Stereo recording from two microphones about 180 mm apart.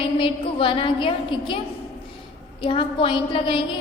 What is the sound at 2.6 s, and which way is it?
A woman's voice, 30° left (ahead or behind).